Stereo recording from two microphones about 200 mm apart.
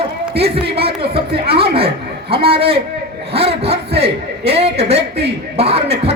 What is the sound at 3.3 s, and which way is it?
A man's voice, 30° right (ahead or behind).